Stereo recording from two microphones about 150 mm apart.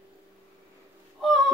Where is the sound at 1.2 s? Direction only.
Centre (ahead or behind).